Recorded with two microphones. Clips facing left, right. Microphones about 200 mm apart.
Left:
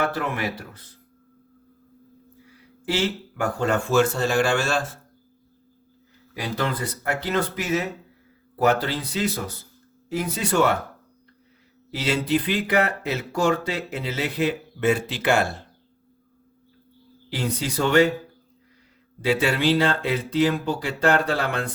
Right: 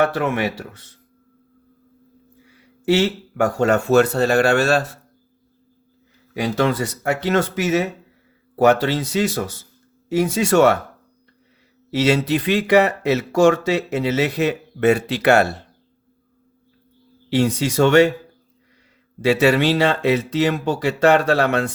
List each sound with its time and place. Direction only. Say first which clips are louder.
0.1 s speech: right 6 dB; 80° right
2.9 s speech: right 7 dB; 75° right (ahead or behind)
6.4 s speech: right 7 dB; 80° right
11.9 s speech: right 5 dB; 75° right (ahead or behind)
17.3 s speech: right 9 dB; 80° right
19.2 s speech: right 6 dB; 75° right (ahead or behind)